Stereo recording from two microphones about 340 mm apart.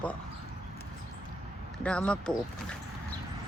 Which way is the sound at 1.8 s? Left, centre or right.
Centre.